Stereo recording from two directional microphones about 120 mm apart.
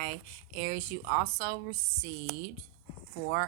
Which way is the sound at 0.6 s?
40° left (ahead or behind).